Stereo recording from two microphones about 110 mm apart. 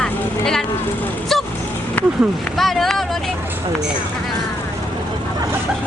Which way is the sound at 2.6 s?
Centre (ahead or behind).